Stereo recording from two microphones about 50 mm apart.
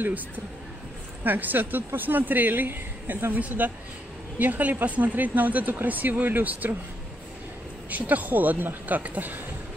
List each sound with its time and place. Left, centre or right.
1.2 s speech: right
3.3 s speech: right
7.9 s speech: right